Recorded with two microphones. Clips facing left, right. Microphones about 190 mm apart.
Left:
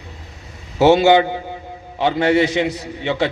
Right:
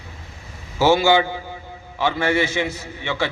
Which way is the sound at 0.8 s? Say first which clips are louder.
Left 4 dB; 20° left (ahead or behind).